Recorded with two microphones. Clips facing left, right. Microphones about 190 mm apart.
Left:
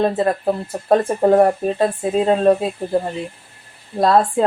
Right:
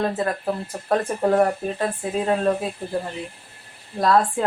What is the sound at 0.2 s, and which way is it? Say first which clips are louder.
Speech: left 6 dB; 35° left (ahead or behind).